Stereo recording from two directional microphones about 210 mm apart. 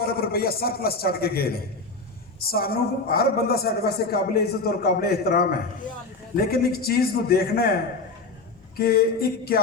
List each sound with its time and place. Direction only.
0.0 s a man's voice: 45° left (ahead or behind)
8.8 s a man's voice: 45° left (ahead or behind)